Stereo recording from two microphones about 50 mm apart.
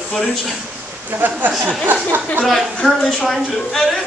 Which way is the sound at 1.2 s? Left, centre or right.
Right.